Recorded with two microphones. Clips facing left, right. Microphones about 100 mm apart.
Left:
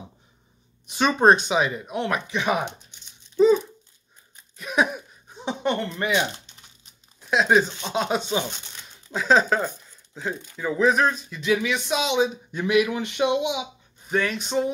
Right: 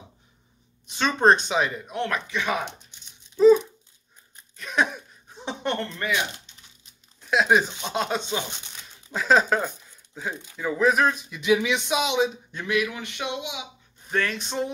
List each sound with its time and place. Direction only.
0.8 s speech: 15° left (ahead or behind)
3.3 s a sound: centre (ahead or behind)
7.2 s speech: centre (ahead or behind); by 11.8 s 15° right (ahead or behind)
11.9 s speech: 5° right (ahead or behind)
12.5 s a man's voice: 15° left (ahead or behind)
14.0 s speech: 5° left (ahead or behind)